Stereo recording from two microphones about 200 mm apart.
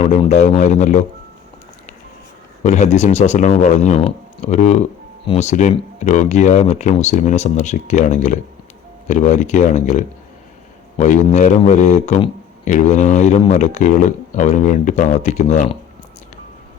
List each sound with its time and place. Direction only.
0.0 s speech: 35° left (ahead or behind)
2.6 s speech: 35° left (ahead or behind)